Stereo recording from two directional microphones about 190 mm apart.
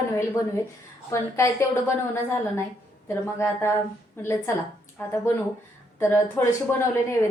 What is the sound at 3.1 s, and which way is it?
A woman's voice, 15° left (ahead or behind).